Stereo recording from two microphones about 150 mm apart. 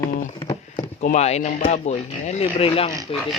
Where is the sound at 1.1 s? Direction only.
45° left (ahead or behind).